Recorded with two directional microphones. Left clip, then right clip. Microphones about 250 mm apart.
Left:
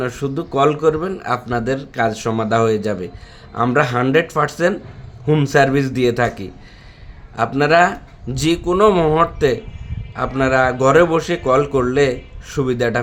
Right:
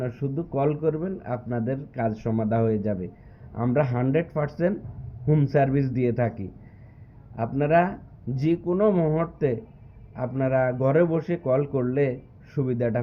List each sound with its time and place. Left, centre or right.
0.0 s a man's voice: centre